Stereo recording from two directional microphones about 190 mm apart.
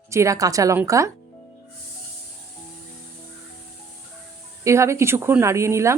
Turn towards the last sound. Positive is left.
turn(degrees=-15)  # may be behind; listen again after turning